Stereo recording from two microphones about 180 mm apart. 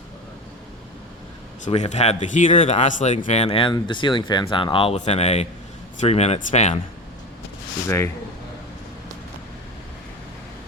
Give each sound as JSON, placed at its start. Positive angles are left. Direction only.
{"t": 1.6, "sound": "speech", "side_deg": 40}
{"t": 7.9, "sound": "speech", "side_deg": 15}